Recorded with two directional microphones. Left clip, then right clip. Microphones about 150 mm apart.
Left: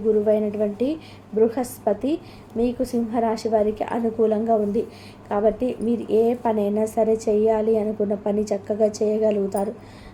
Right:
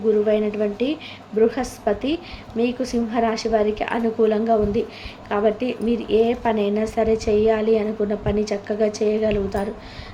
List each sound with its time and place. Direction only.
0.3 s a woman's voice: 45° left (ahead or behind)